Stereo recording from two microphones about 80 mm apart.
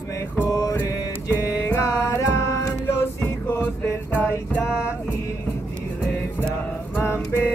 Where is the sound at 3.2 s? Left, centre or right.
Left.